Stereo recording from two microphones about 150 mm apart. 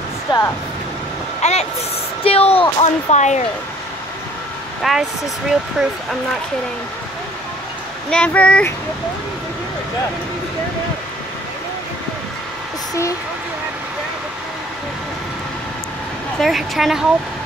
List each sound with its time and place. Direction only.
0.3 s music: 30° left (ahead or behind)
1.4 s speech: 45° left (ahead or behind)
4.9 s a woman's voice: centre (ahead or behind)
8.1 s speech: 10° left (ahead or behind)
16.3 s a woman's voice: centre (ahead or behind)